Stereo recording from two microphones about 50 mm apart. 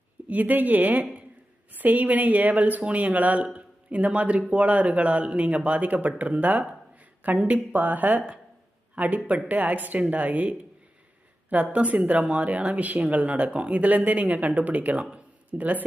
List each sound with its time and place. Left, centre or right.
0.3 s speech: right